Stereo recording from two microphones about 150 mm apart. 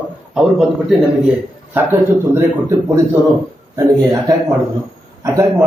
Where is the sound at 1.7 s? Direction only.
15° right (ahead or behind).